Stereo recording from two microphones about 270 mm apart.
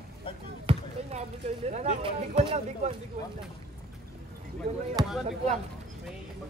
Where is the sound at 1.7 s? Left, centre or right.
Right.